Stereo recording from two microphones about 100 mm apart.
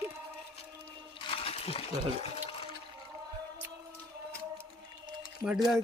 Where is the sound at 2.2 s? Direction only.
90° left.